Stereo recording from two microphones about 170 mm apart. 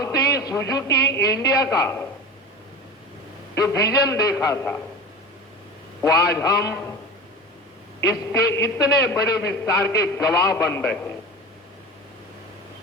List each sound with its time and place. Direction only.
0.0 s a man's voice: 20° left (ahead or behind)
3.5 s a man's voice: 20° left (ahead or behind)
6.0 s a man's voice: 20° left (ahead or behind)
8.3 s a man's voice: 15° left (ahead or behind)